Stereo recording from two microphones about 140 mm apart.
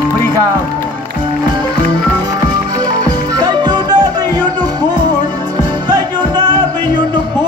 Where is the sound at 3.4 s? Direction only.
30° right (ahead or behind).